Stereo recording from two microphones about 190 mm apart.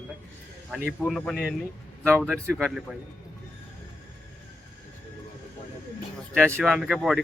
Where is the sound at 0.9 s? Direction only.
Centre (ahead or behind).